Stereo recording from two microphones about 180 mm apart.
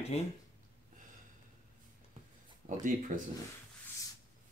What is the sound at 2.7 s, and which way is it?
Speech, 45° right (ahead or behind).